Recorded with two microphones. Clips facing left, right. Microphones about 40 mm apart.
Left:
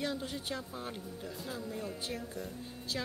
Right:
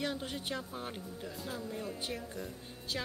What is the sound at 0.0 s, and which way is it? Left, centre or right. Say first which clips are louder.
Speech: even; right.